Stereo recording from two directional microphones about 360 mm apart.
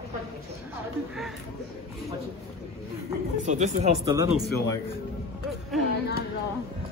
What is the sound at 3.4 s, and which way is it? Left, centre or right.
Speech, centre.